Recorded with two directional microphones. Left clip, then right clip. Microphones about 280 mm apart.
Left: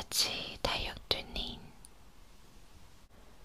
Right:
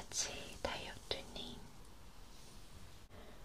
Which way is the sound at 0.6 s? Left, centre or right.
Left.